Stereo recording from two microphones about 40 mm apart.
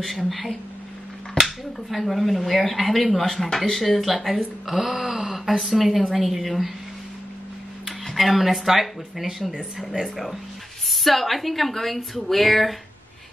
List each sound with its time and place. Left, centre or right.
0.0 s speech: centre
8.1 s speech: centre
9.4 s speech: right
9.8 s speech: centre